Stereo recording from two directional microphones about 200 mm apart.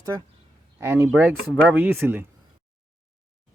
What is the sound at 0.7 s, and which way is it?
Speech, 10° right (ahead or behind).